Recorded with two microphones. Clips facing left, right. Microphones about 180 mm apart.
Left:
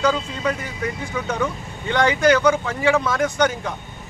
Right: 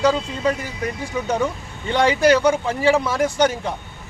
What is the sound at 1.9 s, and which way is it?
Speech, 30° right (ahead or behind).